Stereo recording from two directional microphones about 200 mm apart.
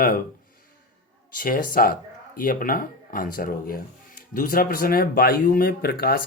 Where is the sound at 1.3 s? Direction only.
45° left (ahead or behind).